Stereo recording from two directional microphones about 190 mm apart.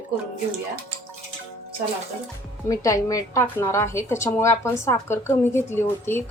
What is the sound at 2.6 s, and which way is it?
A woman's voice, 15° left (ahead or behind).